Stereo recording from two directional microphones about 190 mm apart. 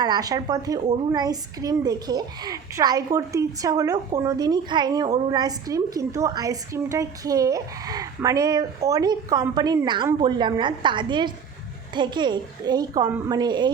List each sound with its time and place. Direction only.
0.0 s a woman's voice: 20° right (ahead or behind)